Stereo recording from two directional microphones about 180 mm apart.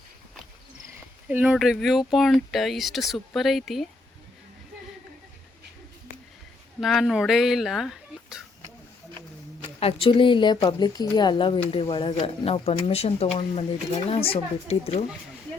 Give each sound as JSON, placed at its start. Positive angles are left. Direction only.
{"t": 1.3, "sound": "speech", "side_deg": -10}
{"t": 6.7, "sound": "speech", "side_deg": 0}
{"t": 9.8, "sound": "speech", "side_deg": 30}